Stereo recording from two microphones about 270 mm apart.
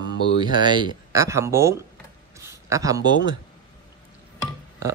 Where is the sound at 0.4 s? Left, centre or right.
Centre.